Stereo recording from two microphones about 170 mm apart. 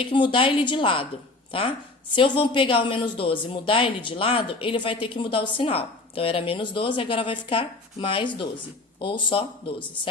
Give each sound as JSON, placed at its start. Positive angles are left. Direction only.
{"t": 0.0, "sound": "a woman's voice", "side_deg": 30}